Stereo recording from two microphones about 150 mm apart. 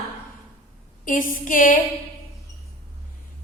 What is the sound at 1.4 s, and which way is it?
Music, 65° left (ahead or behind).